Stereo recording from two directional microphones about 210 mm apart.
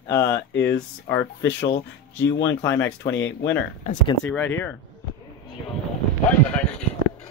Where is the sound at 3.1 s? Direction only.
60° left (ahead or behind).